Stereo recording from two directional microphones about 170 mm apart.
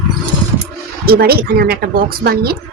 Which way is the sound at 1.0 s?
65° right (ahead or behind).